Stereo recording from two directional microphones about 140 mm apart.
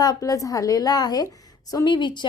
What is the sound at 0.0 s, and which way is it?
Speech, 25° left (ahead or behind).